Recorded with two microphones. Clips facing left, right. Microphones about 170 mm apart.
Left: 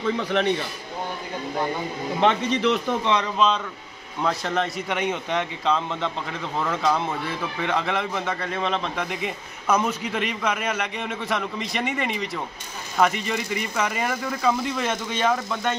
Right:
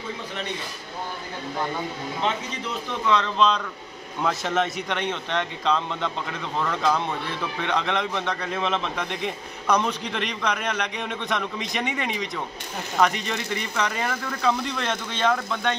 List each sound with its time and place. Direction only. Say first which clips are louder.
0.0 s a man's voice: left 10 dB; 75° left (ahead or behind)
2.1 s a man's voice: left 8 dB; 75° left (ahead or behind)
3.0 s speech: even; 20° left (ahead or behind)
3.3 s a man's voice: even; 5° left (ahead or behind)